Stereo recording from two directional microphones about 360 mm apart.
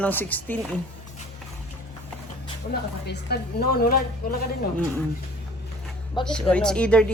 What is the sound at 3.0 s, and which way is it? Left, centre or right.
A woman's voice, left.